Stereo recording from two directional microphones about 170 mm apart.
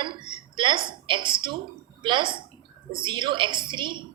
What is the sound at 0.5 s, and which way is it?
A woman's voice, 30° right (ahead or behind).